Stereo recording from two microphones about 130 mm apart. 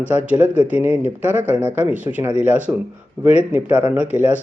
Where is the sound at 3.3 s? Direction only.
15° right (ahead or behind).